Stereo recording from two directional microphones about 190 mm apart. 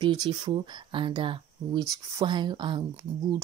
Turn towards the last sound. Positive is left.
turn(degrees=-20)  # may be behind; listen again after turning